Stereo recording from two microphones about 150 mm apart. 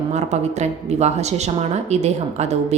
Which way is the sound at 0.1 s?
50° right (ahead or behind).